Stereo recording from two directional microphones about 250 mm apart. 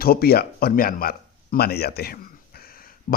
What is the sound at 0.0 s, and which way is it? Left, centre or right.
A man's voice, left.